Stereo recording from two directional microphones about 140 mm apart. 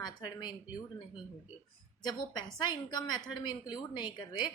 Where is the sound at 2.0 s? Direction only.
30° left (ahead or behind).